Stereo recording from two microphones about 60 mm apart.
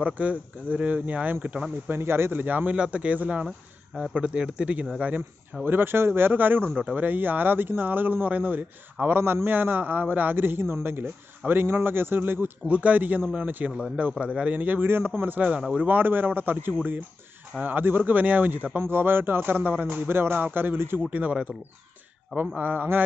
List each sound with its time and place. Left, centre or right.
0.0 s speech: right
1.9 s a man's voice: right
2.4 s speech: right
3.4 s speech: centre
4.1 s speech: right
5.7 s a man's voice: right
12.6 s a man's voice: right
21.1 s speech: right
22.6 s speech: right